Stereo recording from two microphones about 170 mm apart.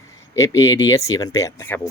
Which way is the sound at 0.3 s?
20° left (ahead or behind).